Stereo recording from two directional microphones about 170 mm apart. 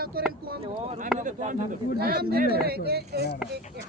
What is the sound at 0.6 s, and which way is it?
Speech, 40° right (ahead or behind).